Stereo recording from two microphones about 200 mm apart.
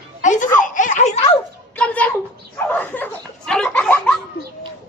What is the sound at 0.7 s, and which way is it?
Snicker, 40° left (ahead or behind).